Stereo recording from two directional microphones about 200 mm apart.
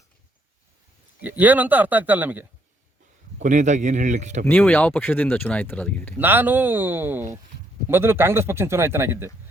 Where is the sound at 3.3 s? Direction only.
40° right (ahead or behind).